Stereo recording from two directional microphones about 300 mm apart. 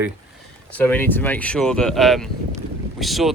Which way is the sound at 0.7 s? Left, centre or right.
Centre.